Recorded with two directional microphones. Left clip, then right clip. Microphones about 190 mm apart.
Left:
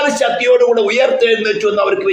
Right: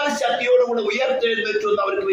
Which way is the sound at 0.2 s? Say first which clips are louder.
Left 5 dB; 50° left (ahead or behind).